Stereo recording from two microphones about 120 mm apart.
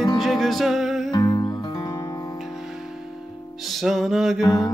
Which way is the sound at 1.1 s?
35° left (ahead or behind).